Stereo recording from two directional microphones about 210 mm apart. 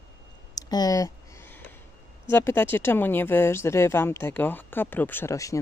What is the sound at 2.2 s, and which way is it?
Speech, 10° left (ahead or behind).